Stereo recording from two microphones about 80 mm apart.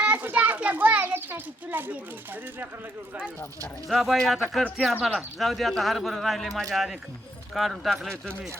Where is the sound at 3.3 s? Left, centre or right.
Left.